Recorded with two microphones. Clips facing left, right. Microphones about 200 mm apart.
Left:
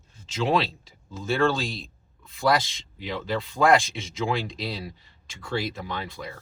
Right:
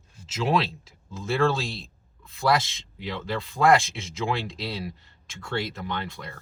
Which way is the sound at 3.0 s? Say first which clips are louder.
Left 2 dB; centre (ahead or behind).